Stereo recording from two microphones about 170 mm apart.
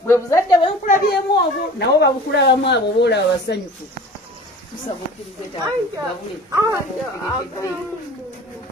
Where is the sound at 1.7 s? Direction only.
80° left.